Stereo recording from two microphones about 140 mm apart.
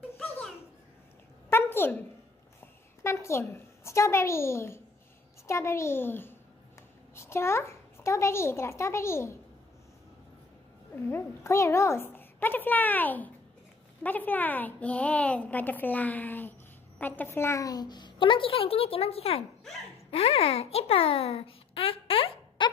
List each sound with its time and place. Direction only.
1.5 s a sound: 15° left (ahead or behind)
3.0 s a child's voice: 20° left (ahead or behind)
11.1 s a woman's voice: 20° left (ahead or behind); by 22.7 s 40° left (ahead or behind)